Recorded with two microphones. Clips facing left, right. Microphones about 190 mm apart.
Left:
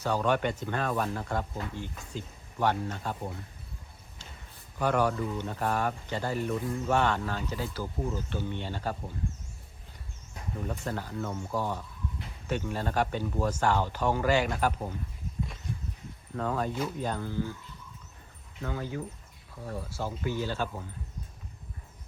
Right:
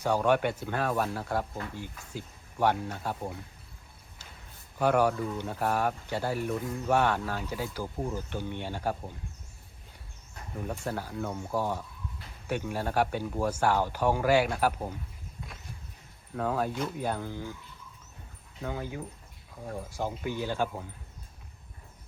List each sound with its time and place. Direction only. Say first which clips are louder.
0.0 s speech: right 2 dB; 10° right (ahead or behind)
4.8 s speech: right 2 dB; 10° right (ahead or behind)
10.7 s speech: right 2 dB; 10° right (ahead or behind)
16.3 s speech: right 1 dB; 5° right (ahead or behind)
18.6 s speech: left 1 dB; 15° right (ahead or behind)